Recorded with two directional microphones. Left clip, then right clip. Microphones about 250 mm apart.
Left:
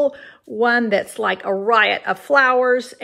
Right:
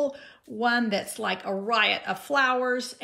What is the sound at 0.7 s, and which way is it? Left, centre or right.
Speech, centre.